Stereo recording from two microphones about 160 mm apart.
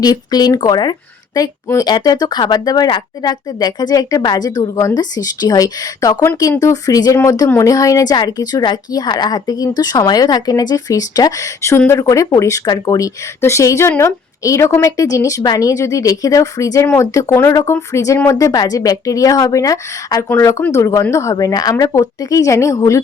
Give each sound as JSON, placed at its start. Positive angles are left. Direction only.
{"t": 0.0, "sound": "speech", "side_deg": 25}